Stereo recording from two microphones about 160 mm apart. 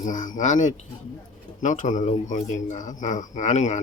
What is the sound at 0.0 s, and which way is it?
Speech, 55° left (ahead or behind).